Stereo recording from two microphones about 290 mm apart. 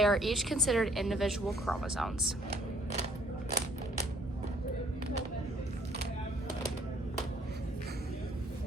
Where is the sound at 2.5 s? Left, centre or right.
Right.